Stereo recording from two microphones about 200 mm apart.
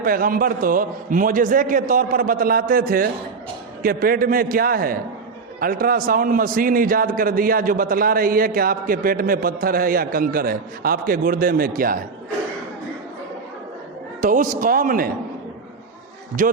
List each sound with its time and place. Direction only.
0.0 s a man's voice: 45° right (ahead or behind)
14.2 s a man's voice: 40° right (ahead or behind)
16.4 s a man's voice: 40° right (ahead or behind)